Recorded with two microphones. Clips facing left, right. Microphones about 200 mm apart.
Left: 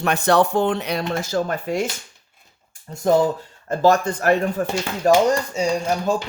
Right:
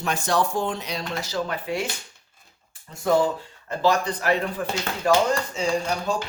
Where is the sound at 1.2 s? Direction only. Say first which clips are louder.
Left 5 dB; 50° left (ahead or behind).